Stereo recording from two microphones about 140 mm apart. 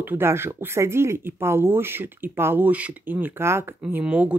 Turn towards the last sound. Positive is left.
turn(degrees=-10)  # may be behind; listen again after turning